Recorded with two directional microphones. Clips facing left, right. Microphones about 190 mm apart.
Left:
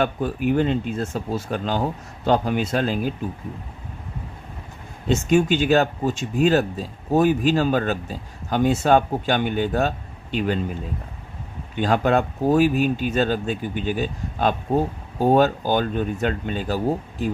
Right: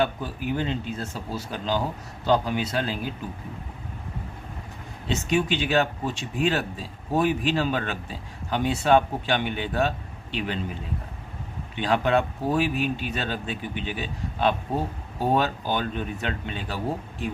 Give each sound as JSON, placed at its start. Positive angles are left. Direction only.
{"t": 0.0, "sound": "speech", "side_deg": 55}
{"t": 5.0, "sound": "speech", "side_deg": 45}
{"t": 11.7, "sound": "speech", "side_deg": 45}